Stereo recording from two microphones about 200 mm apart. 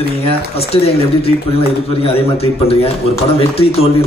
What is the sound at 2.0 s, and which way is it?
A man's voice, 30° left (ahead or behind).